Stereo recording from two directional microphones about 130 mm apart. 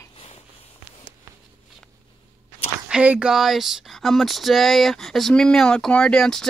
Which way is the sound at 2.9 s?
10° right (ahead or behind).